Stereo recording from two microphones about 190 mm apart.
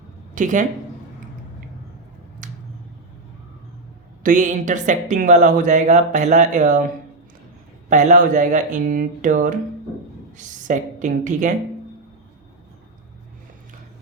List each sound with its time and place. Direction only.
0.3 s speech: 40° right (ahead or behind)
2.4 s finger snapping: 45° right (ahead or behind)
4.2 s a woman's voice: 40° right (ahead or behind)